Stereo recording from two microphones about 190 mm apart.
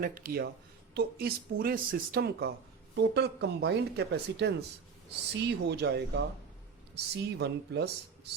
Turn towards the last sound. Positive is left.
turn(degrees=-60)  # may be behind; listen again after turning